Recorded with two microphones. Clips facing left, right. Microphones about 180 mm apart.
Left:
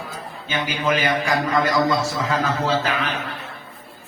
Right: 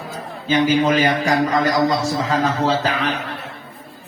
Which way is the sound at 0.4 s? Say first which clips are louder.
Right 8 dB; 40° right (ahead or behind).